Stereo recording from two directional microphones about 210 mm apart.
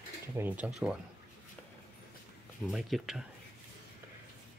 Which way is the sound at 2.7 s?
Centre (ahead or behind).